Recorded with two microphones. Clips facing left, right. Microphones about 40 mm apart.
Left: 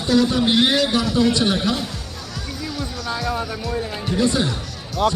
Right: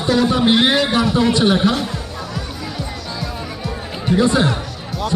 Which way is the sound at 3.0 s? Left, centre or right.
Left.